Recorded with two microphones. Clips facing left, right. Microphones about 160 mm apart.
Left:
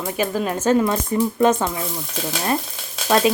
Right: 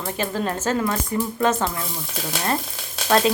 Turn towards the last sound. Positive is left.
turn(degrees=10)  # may be behind; listen again after turning